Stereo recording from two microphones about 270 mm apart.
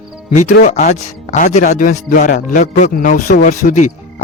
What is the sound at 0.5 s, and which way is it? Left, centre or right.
Speech, left.